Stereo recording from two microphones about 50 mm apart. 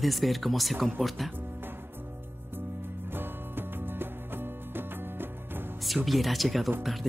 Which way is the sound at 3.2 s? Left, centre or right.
Right.